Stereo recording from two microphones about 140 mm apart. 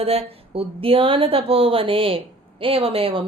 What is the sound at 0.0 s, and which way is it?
Speech, 45° right (ahead or behind).